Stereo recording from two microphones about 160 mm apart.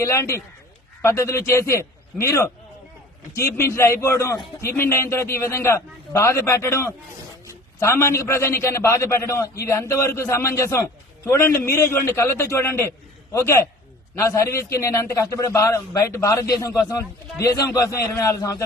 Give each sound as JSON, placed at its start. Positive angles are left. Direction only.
{"t": 0.0, "sound": "a man's voice", "side_deg": 15}
{"t": 3.6, "sound": "a man's voice", "side_deg": 15}